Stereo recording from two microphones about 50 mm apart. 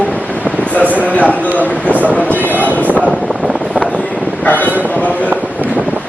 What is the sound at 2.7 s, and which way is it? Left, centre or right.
Vehicle, right.